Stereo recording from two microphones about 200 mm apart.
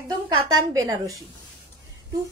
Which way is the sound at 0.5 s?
15° right (ahead or behind).